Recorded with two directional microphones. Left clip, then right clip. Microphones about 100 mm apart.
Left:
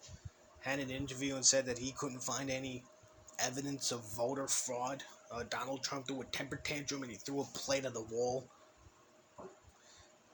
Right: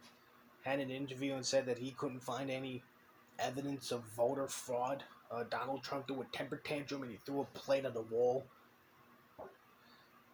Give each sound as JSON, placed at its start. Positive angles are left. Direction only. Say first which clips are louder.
{"t": 0.6, "sound": "speech", "louder": "even", "side_deg": 45}